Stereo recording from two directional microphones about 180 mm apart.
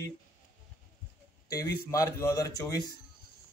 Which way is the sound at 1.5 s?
20° left (ahead or behind).